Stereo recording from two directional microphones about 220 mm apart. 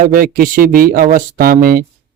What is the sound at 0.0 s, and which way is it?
Speech, 40° right (ahead or behind).